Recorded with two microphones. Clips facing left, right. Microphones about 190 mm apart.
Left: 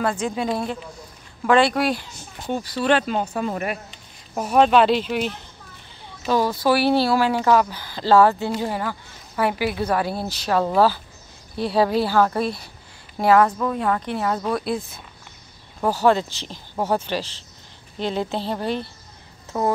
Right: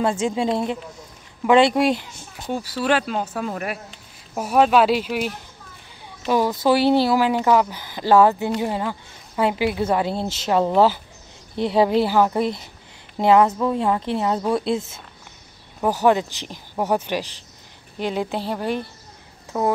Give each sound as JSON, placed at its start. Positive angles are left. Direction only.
{"t": 0.0, "sound": "a woman's voice", "side_deg": -25}
{"t": 2.3, "sound": "speech", "side_deg": -5}
{"t": 6.2, "sound": "a woman's voice", "side_deg": -15}